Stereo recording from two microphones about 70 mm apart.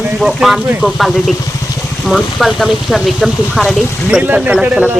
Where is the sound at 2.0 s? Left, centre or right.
Centre.